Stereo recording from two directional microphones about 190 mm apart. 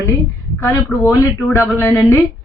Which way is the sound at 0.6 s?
15° left (ahead or behind).